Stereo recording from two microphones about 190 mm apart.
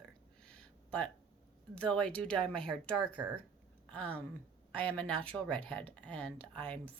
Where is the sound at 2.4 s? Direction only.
25° right (ahead or behind).